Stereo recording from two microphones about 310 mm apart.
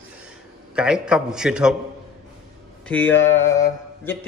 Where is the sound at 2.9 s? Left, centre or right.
Centre.